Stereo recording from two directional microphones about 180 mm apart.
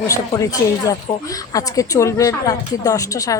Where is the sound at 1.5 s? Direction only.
20° left (ahead or behind).